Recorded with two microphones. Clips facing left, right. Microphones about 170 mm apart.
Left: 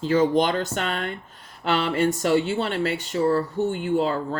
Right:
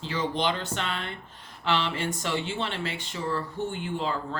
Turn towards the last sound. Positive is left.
turn(degrees=40)  # may be behind; listen again after turning